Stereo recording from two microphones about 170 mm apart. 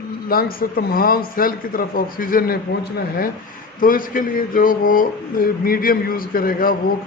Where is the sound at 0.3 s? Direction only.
60° left (ahead or behind).